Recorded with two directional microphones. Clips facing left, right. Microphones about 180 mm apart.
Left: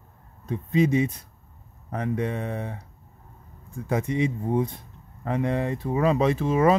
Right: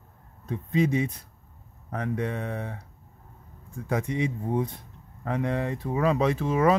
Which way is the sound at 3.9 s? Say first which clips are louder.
Left 3 dB; 25° left (ahead or behind).